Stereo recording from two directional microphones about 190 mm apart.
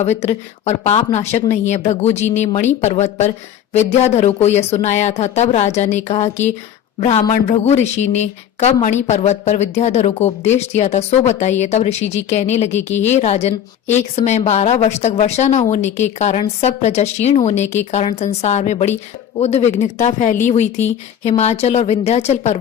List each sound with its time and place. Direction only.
0.0 s a woman's voice: 35° left (ahead or behind)